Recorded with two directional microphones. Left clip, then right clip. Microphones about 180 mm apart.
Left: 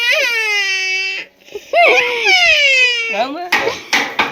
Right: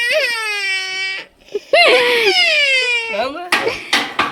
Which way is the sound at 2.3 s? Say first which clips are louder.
Left 3 dB; 10° right (ahead or behind).